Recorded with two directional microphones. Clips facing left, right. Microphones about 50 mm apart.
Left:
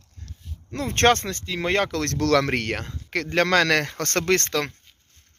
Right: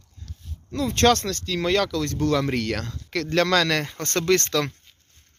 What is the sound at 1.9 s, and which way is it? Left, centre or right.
Speech, left.